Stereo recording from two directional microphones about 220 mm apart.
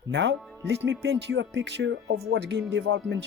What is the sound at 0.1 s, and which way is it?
Speech, 55° right (ahead or behind).